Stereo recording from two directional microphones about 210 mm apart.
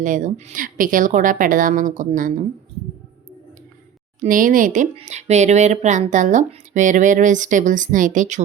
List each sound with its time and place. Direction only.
0.0 s speech: 35° right (ahead or behind)
4.2 s speech: 40° right (ahead or behind)